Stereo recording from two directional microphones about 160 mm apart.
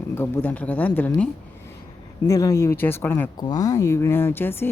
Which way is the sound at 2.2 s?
20° left (ahead or behind).